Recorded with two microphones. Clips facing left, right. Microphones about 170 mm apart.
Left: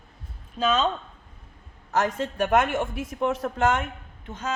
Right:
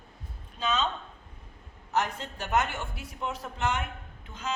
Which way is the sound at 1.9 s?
90° left.